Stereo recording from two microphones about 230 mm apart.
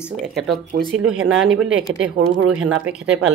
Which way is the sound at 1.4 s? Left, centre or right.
Centre.